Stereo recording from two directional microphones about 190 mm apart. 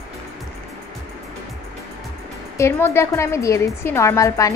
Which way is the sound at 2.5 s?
15° left (ahead or behind).